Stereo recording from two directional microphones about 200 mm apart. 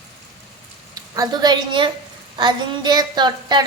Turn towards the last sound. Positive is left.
turn(degrees=-20)  # may be behind; listen again after turning